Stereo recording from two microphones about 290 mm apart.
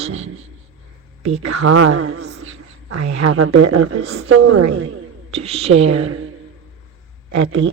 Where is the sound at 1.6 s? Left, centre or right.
Right.